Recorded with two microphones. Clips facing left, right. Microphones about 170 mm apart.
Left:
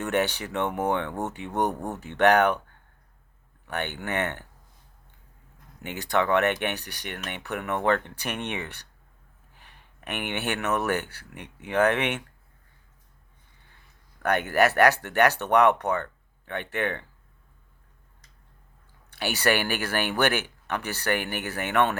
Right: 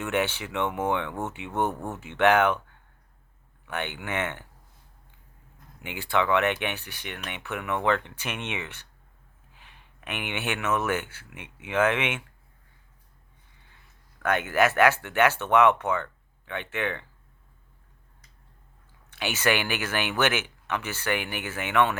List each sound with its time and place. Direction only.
0.0 s speech: 40° left (ahead or behind)
1.5 s speech: 15° left (ahead or behind)
2.1 s speech: 40° left (ahead or behind)
3.7 s speech: 40° left (ahead or behind)
6.0 s speech: 40° left (ahead or behind)
10.1 s speech: 40° left (ahead or behind)
14.2 s speech: 40° left (ahead or behind)
19.2 s speech: 40° left (ahead or behind)